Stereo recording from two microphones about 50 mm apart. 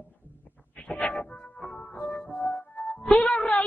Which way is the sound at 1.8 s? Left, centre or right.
Left.